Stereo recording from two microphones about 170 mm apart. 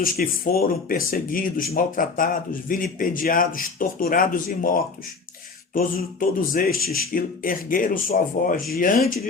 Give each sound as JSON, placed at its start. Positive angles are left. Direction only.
{"t": 0.0, "sound": "speech", "side_deg": 55}